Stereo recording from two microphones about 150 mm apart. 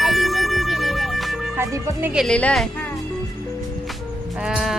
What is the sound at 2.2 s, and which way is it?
Speech, 5° left (ahead or behind).